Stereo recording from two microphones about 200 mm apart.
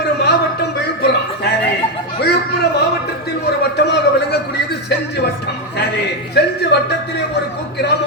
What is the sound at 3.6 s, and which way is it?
A man's voice, 55° left (ahead or behind).